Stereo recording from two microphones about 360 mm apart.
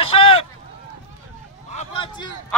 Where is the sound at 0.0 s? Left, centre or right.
Centre.